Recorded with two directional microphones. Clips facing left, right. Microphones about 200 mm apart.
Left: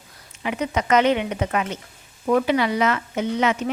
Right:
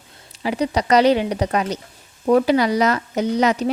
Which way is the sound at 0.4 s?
35° right (ahead or behind).